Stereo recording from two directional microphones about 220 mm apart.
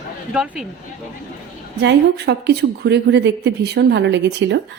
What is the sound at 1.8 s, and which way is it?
A woman's voice, 50° right (ahead or behind).